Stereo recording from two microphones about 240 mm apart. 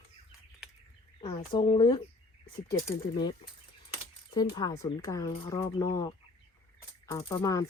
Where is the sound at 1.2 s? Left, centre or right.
Left.